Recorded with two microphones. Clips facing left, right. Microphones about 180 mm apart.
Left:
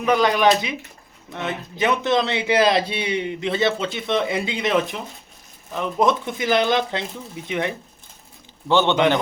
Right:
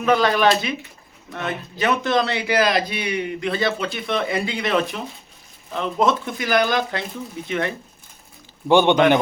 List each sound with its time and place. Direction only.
0.0 s a man's voice: 15° left (ahead or behind)
8.6 s a man's voice: 15° right (ahead or behind)